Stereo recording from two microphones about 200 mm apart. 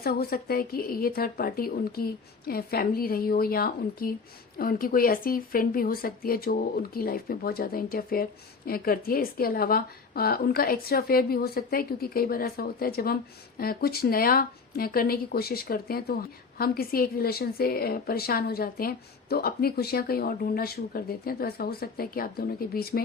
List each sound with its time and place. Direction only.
0.0 s speech: 50° left (ahead or behind)